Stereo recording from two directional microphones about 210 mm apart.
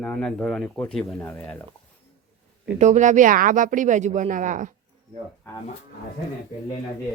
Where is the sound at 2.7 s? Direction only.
35° right (ahead or behind).